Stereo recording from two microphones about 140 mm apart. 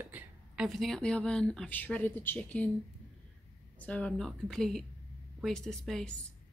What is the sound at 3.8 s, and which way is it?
A woman's voice, 10° left (ahead or behind).